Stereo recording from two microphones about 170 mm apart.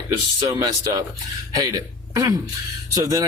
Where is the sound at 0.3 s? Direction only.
20° right (ahead or behind).